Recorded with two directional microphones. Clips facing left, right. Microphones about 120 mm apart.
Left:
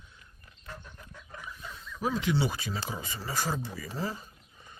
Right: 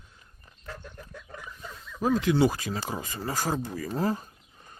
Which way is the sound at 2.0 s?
40° right (ahead or behind).